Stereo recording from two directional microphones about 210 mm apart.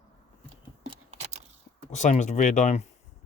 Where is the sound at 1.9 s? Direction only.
35° left (ahead or behind).